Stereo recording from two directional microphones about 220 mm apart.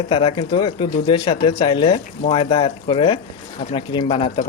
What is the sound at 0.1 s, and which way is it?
Speech, 25° left (ahead or behind).